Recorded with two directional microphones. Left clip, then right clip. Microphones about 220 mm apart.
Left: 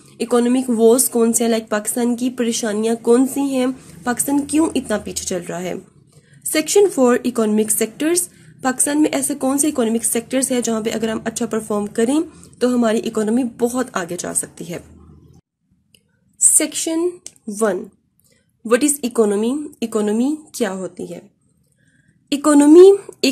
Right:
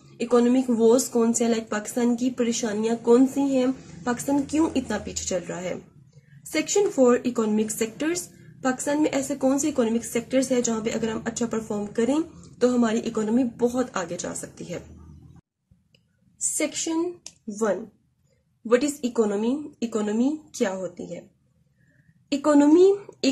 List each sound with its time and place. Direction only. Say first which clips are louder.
0.2 s speech: left 4 dB; 40° left (ahead or behind)
16.5 s a woman's voice: left 1 dB; 40° left (ahead or behind)
22.3 s a woman's voice: left 8 dB; 45° left (ahead or behind)